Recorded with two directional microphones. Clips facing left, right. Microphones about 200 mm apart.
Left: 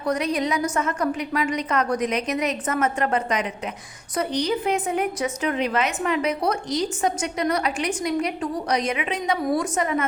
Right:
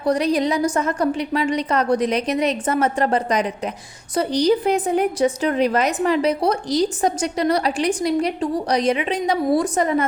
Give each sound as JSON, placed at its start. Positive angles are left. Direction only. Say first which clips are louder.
{"t": 0.0, "sound": "a woman's voice", "louder": "right 5 dB", "side_deg": -35}